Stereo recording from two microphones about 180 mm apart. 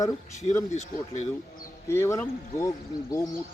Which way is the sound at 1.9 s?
15° left (ahead or behind).